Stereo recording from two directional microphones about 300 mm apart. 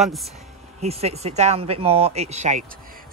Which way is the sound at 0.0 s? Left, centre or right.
Centre.